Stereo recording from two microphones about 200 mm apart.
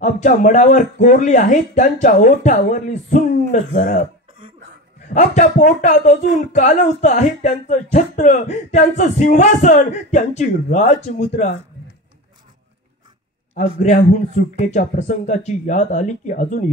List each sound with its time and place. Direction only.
0.0 s speech: 40° left (ahead or behind)
5.1 s speech: 35° left (ahead or behind)
13.6 s speech: 35° left (ahead or behind)